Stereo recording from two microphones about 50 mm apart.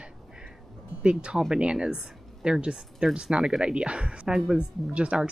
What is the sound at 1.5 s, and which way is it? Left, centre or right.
Speech, centre.